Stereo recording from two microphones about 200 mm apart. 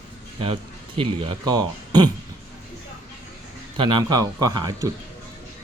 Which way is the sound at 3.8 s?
20° right (ahead or behind).